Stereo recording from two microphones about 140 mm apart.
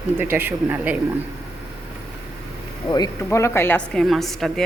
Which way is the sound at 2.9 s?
25° left (ahead or behind).